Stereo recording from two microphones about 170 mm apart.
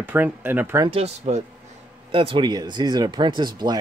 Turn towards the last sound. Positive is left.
turn(degrees=-25)  # may be behind; listen again after turning